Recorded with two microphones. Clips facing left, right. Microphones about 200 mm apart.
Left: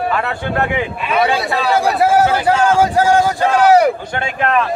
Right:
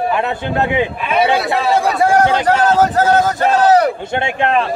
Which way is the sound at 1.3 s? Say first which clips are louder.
Right 1 dB; centre (ahead or behind).